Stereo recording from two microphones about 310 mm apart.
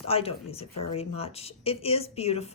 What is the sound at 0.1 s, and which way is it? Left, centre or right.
Speech, centre.